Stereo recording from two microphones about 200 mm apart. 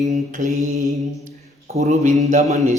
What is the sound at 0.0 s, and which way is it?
Speech, 40° right (ahead or behind).